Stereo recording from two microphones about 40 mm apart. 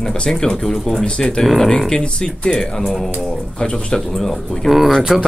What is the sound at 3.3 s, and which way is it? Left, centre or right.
Speech, left.